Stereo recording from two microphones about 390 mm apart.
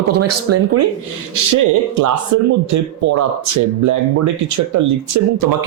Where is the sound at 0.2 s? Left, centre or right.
Right.